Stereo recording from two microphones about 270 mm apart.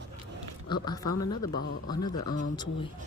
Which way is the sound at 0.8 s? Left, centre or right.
Centre.